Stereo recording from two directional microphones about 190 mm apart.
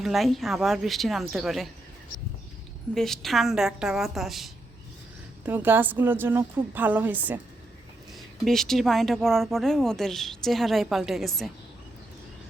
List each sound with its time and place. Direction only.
0.0 s speech: centre (ahead or behind)
2.9 s a woman's voice: centre (ahead or behind)
8.4 s speech: centre (ahead or behind)